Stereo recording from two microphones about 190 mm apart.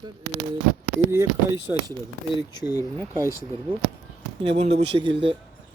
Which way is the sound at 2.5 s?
20° left (ahead or behind).